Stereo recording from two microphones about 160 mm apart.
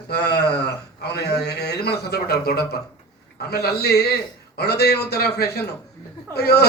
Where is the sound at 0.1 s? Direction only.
90° left.